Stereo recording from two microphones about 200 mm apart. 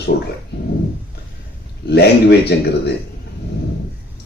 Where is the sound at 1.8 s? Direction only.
55° left (ahead or behind).